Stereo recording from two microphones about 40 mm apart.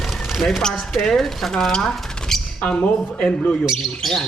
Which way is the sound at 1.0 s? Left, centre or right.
Centre.